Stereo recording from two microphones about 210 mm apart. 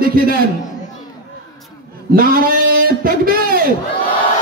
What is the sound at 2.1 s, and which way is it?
A man's voice, 45° right (ahead or behind).